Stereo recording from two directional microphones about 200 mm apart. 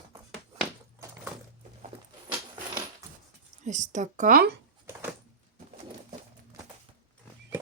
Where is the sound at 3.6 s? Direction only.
35° right (ahead or behind).